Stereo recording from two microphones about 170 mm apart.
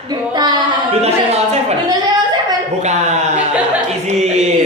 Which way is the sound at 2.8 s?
40° right (ahead or behind).